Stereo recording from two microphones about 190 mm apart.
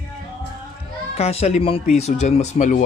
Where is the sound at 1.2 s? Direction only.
35° left (ahead or behind).